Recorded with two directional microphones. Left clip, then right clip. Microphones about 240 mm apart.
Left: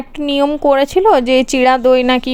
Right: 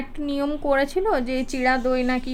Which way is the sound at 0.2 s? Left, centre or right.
Left.